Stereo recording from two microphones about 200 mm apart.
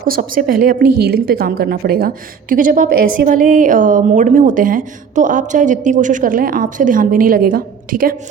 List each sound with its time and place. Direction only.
0.1 s a woman's voice: 45° right (ahead or behind)